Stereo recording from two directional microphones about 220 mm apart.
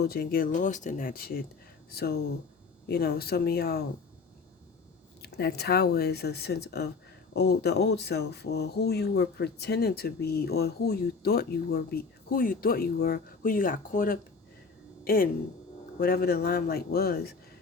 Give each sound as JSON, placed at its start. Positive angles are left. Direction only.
{"t": 0.0, "sound": "speech", "side_deg": 45}
{"t": 5.2, "sound": "speech", "side_deg": 45}